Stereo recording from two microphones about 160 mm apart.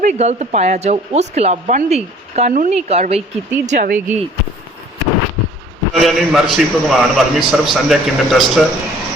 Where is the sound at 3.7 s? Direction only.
55° right (ahead or behind).